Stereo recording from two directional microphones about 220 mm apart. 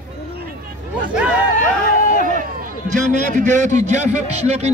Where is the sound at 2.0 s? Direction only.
35° left (ahead or behind).